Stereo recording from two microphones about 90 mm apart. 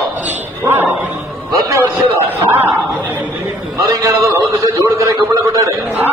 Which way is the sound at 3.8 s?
45° right (ahead or behind).